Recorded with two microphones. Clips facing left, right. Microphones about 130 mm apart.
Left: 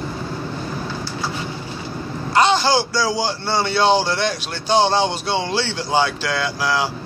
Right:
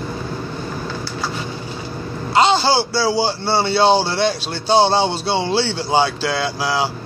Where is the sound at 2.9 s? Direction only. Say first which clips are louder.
Right 3 dB; 30° right (ahead or behind).